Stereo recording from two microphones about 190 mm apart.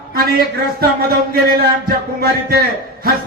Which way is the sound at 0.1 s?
50° right (ahead or behind).